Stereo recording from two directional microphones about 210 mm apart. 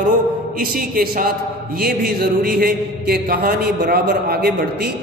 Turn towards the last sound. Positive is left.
turn(degrees=-50)  # may be behind; listen again after turning